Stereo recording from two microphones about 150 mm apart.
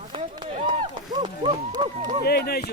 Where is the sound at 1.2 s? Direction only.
30° right (ahead or behind).